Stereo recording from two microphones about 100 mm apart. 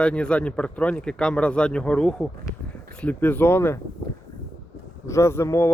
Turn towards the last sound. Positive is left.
turn(degrees=25)  # may be behind; listen again after turning